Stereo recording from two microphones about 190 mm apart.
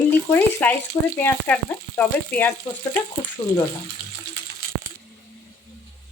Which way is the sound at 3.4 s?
30° left (ahead or behind).